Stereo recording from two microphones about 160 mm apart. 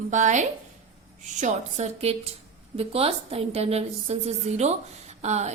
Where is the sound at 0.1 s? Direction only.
50° right (ahead or behind).